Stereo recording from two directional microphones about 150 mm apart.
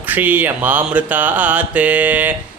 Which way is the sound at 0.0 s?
10° right (ahead or behind).